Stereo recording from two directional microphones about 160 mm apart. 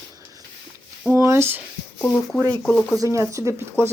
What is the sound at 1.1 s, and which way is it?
Speech, 15° right (ahead or behind).